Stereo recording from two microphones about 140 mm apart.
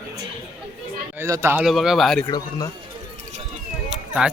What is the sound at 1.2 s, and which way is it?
Speech, 20° right (ahead or behind).